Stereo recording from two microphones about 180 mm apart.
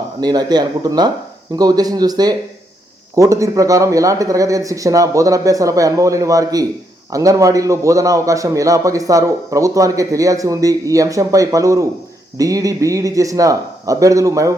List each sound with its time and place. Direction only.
0.2 s a man's voice: 20° right (ahead or behind)